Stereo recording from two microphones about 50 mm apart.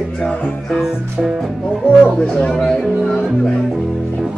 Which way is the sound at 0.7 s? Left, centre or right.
Centre.